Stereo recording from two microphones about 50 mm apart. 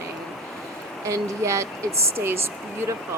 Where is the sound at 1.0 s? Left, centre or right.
Right.